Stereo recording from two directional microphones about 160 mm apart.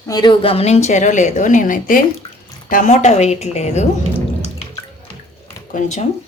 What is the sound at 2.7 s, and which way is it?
A woman's voice, 55° left (ahead or behind).